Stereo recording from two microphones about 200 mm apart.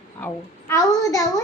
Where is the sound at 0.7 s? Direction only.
15° left (ahead or behind).